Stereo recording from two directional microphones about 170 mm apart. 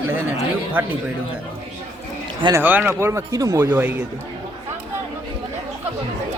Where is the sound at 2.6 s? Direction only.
10° right (ahead or behind).